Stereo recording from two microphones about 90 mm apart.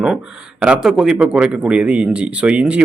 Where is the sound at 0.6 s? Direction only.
10° right (ahead or behind).